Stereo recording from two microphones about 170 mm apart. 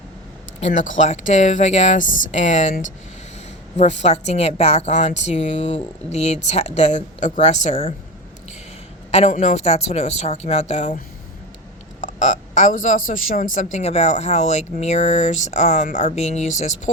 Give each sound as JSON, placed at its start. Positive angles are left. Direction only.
{"t": 0.6, "sound": "a woman's voice", "side_deg": 45}
{"t": 9.1, "sound": "a woman's voice", "side_deg": 40}